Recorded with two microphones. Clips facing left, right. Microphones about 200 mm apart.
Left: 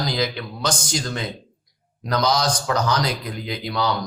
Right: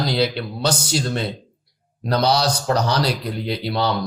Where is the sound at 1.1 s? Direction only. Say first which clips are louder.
Right 4 dB; 30° right (ahead or behind).